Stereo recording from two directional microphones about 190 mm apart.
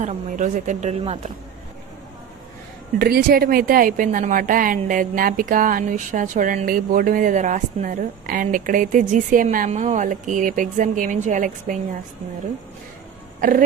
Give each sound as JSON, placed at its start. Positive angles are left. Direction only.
{"t": 0.0, "sound": "speech", "side_deg": -40}
{"t": 3.0, "sound": "a woman's voice", "side_deg": -55}
{"t": 13.4, "sound": "a woman's voice", "side_deg": -45}